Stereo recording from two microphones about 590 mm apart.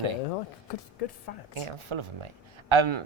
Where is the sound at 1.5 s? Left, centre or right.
Right.